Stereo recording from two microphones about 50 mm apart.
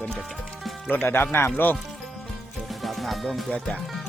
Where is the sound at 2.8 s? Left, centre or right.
Centre.